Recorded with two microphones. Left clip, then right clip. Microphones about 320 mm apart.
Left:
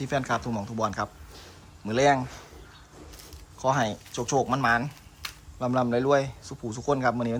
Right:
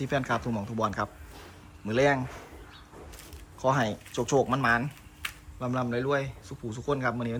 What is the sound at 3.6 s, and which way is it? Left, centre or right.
A man's voice, centre.